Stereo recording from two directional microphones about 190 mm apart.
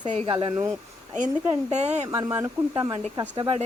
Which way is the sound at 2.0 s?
15° right (ahead or behind).